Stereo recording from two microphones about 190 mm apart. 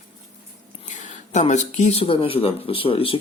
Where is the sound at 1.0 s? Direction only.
40° left (ahead or behind).